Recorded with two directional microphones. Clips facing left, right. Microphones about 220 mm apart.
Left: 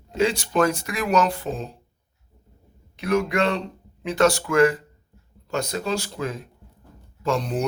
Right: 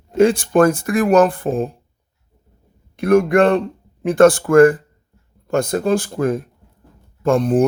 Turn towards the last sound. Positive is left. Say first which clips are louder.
# right 9 dB
turn(degrees=-50)  # may be behind; listen again after turning